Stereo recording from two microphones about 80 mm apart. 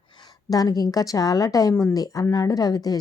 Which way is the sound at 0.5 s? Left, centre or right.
Left.